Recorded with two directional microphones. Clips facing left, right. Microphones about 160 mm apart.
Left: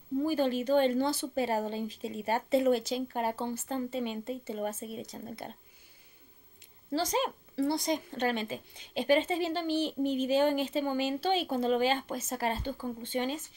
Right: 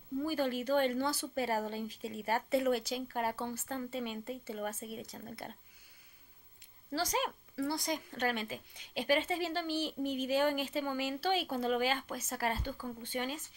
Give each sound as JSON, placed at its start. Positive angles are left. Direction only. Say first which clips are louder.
{"t": 0.2, "sound": "speech", "louder": "left 5 dB", "side_deg": 25}
{"t": 6.9, "sound": "speech", "louder": "left 4 dB", "side_deg": 25}